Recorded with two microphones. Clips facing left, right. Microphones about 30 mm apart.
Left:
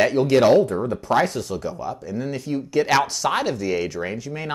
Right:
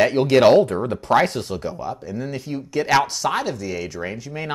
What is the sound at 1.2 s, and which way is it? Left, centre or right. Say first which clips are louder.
Speech: right 1 dB; right.